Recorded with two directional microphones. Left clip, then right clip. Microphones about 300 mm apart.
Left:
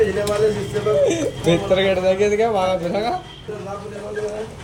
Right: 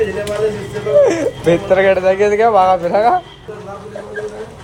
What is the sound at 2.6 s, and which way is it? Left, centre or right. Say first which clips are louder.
Speech: right 8 dB; centre.